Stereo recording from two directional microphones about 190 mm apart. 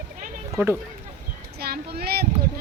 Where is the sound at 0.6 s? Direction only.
10° right (ahead or behind).